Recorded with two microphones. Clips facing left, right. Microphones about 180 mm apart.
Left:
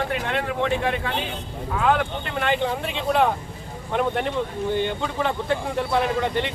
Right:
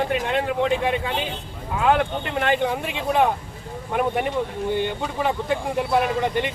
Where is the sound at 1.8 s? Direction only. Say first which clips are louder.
Right 2 dB; 5° right (ahead or behind).